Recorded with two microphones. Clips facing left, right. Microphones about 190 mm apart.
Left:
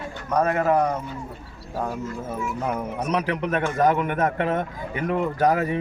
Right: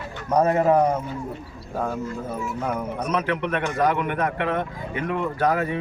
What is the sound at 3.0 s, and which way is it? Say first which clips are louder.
Speech: even; 35° left (ahead or behind).